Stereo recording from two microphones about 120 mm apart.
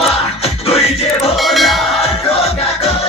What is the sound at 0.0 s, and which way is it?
Music, 55° left (ahead or behind).